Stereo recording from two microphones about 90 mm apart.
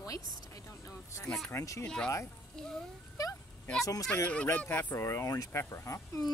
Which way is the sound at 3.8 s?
40° left (ahead or behind).